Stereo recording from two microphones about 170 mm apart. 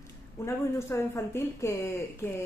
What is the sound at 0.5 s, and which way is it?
A woman's voice, 15° left (ahead or behind).